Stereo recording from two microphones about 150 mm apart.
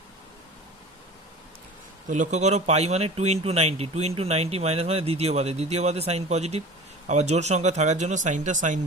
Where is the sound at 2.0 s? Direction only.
55° right (ahead or behind).